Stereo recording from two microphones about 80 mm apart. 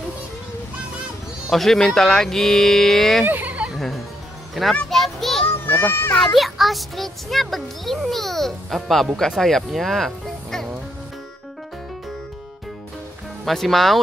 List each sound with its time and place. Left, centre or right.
1.5 s a child's voice: centre
3.3 s a sound: right
3.7 s a child's voice: centre
5.5 s a child's voice: left
6.3 s a child's voice: centre
13.5 s a child's voice: centre